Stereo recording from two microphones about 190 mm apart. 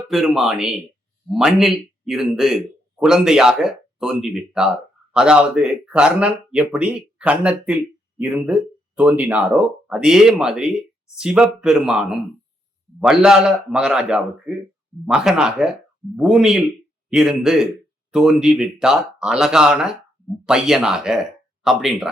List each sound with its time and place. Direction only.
0.1 s speech: centre (ahead or behind)